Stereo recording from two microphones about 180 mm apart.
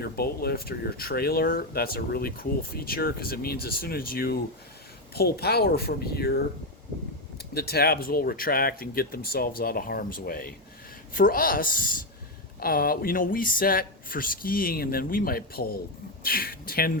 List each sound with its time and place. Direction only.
0.0 s speech: 60° left (ahead or behind)
7.5 s speech: 60° left (ahead or behind)